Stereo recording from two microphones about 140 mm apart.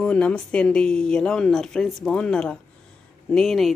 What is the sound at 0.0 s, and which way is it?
Speech, 10° left (ahead or behind).